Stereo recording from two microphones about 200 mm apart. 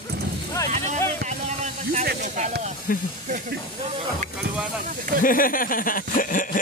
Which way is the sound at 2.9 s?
45° left (ahead or behind).